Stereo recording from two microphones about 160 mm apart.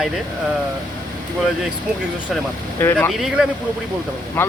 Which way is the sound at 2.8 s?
10° left (ahead or behind).